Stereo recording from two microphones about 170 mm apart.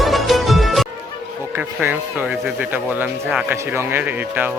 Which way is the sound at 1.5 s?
10° right (ahead or behind).